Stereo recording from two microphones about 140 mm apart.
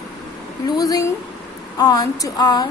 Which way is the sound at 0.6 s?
25° left (ahead or behind).